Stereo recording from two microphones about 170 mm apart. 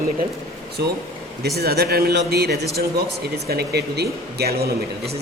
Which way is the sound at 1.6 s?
65° right (ahead or behind).